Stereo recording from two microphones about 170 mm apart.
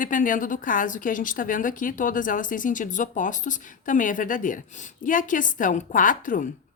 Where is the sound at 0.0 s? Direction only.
50° left (ahead or behind).